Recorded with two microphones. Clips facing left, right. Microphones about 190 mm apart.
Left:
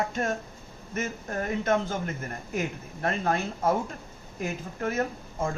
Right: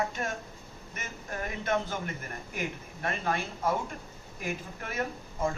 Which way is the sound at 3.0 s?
45° left (ahead or behind).